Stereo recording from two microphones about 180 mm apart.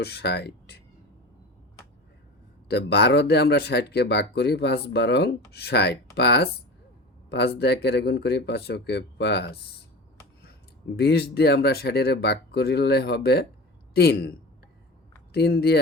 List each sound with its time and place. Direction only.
0.0 s speech: 65° left (ahead or behind)
2.6 s speech: 65° left (ahead or behind)
10.9 s speech: 60° left (ahead or behind)